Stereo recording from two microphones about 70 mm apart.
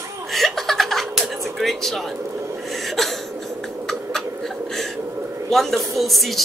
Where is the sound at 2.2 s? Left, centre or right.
Right.